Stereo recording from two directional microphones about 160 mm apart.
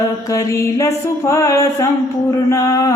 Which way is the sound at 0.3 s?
20° left (ahead or behind).